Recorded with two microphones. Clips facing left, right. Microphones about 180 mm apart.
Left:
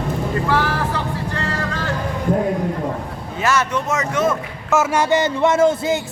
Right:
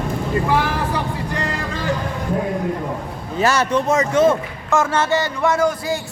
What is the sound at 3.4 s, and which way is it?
Speech, 35° right (ahead or behind).